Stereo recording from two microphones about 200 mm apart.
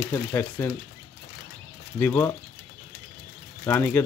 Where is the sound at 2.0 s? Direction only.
10° left (ahead or behind).